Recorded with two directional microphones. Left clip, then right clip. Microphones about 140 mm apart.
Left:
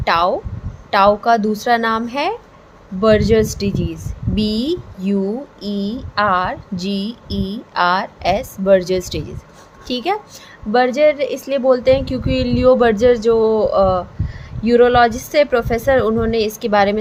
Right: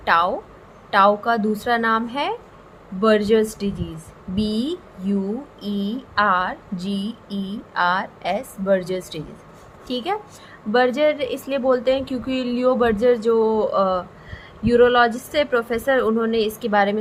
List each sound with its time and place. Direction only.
0.0 s a woman's voice: 35° left (ahead or behind)